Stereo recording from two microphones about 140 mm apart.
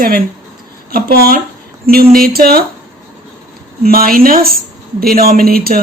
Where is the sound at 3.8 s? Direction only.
90° right.